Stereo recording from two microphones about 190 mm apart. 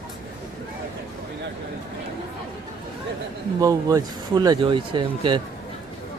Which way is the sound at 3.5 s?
20° right (ahead or behind).